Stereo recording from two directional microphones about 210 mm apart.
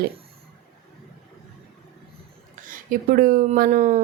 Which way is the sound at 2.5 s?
40° right (ahead or behind).